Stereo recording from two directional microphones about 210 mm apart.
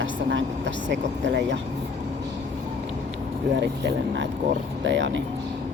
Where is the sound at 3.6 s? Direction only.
55° right (ahead or behind).